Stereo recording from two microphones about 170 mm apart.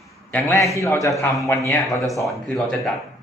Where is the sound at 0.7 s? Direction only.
15° left (ahead or behind).